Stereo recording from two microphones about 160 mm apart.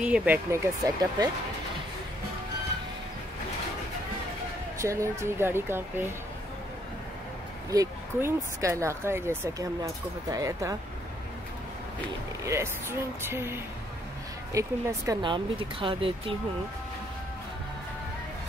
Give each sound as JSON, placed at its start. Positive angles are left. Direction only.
{"t": 0.0, "sound": "speech", "side_deg": -5}
{"t": 0.5, "sound": "speech", "side_deg": -20}
{"t": 4.7, "sound": "speech", "side_deg": -20}
{"t": 7.7, "sound": "speech", "side_deg": -20}
{"t": 13.3, "sound": "speech", "side_deg": -15}
{"t": 15.2, "sound": "speech", "side_deg": -30}